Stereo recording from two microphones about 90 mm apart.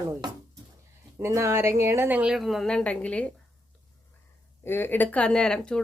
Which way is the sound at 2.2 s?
5° right (ahead or behind).